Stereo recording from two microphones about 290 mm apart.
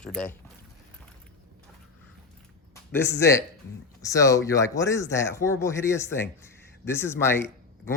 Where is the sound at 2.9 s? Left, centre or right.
Centre.